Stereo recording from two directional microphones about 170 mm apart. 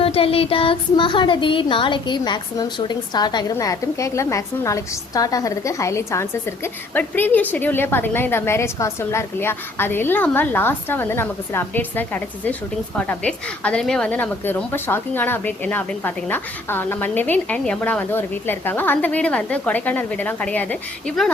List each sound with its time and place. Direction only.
0.0 s a woman's voice: 35° left (ahead or behind); by 20.7 s 10° left (ahead or behind)